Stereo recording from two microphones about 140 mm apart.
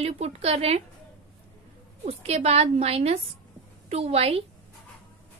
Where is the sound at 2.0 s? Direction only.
50° right (ahead or behind).